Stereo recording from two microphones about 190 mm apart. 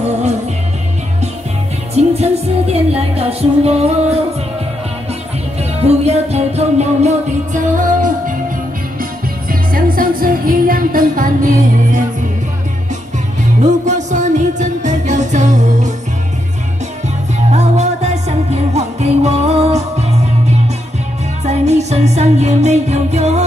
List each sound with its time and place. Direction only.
0.0 s music: 35° right (ahead or behind)
2.0 s music: 35° right (ahead or behind)
5.6 s music: 35° right (ahead or behind)
9.5 s music: 50° right (ahead or behind)
13.6 s music: 40° right (ahead or behind)
17.5 s music: 35° right (ahead or behind)
21.5 s music: 35° right (ahead or behind)